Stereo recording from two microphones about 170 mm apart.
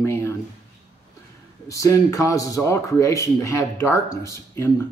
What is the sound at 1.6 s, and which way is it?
A man's voice, 20° left (ahead or behind).